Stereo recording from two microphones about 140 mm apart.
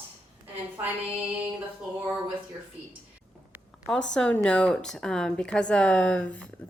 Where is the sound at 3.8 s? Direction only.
5° left (ahead or behind).